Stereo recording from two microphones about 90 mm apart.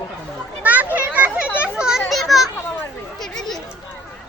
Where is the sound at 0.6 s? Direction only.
15° right (ahead or behind).